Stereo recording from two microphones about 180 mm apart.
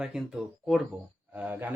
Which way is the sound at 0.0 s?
5° right (ahead or behind).